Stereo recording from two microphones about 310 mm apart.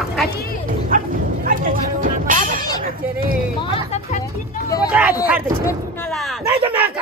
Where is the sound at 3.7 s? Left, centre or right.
Centre.